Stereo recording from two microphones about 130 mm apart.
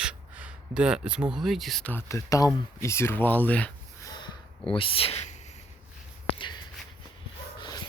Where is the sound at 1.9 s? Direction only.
20° left (ahead or behind).